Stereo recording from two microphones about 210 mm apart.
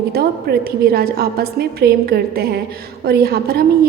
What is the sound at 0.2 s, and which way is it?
A woman's voice, 45° right (ahead or behind).